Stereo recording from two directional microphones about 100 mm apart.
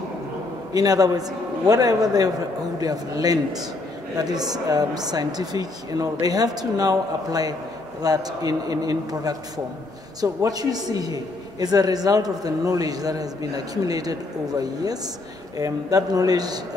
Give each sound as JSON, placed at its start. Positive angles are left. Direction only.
{"t": 0.7, "sound": "a man's voice", "side_deg": -40}